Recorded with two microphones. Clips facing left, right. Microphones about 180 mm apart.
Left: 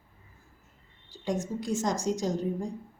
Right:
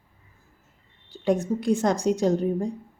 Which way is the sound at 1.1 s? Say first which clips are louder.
Right 8 dB; 60° right (ahead or behind).